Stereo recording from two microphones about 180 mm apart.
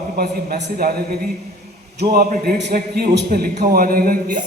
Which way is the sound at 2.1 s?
55° right (ahead or behind).